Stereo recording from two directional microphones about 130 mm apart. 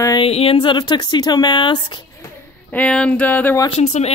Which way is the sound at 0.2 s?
45° left (ahead or behind).